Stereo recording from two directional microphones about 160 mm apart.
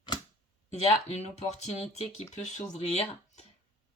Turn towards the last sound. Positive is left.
turn(degrees=45)  # may be behind; listen again after turning